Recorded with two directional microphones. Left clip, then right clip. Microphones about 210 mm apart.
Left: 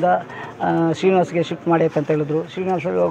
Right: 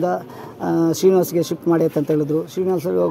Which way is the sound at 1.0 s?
65° right (ahead or behind).